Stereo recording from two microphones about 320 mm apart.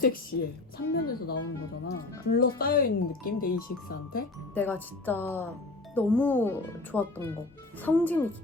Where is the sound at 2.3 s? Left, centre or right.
Left.